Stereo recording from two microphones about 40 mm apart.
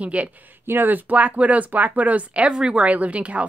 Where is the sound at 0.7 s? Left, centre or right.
Right.